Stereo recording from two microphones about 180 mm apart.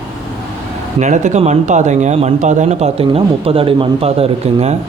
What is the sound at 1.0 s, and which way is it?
Speech, 40° right (ahead or behind).